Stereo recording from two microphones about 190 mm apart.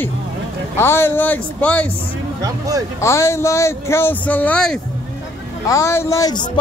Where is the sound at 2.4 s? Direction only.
20° right (ahead or behind).